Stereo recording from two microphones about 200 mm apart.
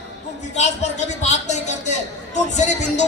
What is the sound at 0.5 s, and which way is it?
Speech, 35° left (ahead or behind).